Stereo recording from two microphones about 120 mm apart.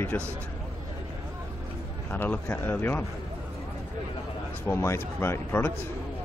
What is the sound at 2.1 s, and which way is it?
Speech, 15° left (ahead or behind).